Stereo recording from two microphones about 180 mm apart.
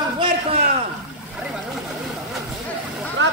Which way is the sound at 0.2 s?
30° right (ahead or behind).